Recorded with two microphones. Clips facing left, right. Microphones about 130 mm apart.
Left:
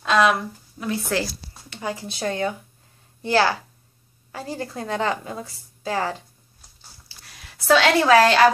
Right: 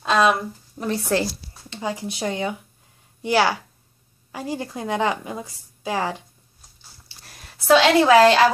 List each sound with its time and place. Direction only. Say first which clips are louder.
0.0 s speech: even; 30° right (ahead or behind)
1.2 s a woman's voice: right 4 dB; 20° right (ahead or behind)
7.6 s a woman's voice: right 2 dB; 20° right (ahead or behind)